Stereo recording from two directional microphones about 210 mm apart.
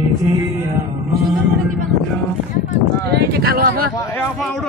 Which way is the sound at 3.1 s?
45° right (ahead or behind).